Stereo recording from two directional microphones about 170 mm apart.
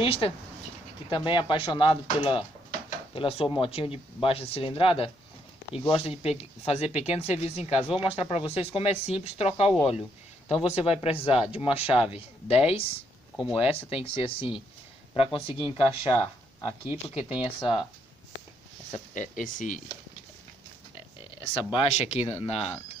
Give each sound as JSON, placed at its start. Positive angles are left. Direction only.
{"t": 0.0, "sound": "speech", "side_deg": 35}
{"t": 18.9, "sound": "speech", "side_deg": 50}
{"t": 21.7, "sound": "speech", "side_deg": 40}